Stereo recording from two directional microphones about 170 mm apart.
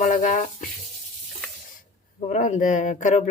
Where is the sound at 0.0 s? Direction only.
50° left (ahead or behind).